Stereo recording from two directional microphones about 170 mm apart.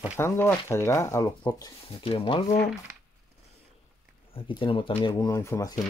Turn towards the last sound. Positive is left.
turn(degrees=20)  # may be behind; listen again after turning